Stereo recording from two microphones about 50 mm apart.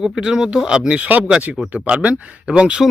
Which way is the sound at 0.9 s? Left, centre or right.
Right.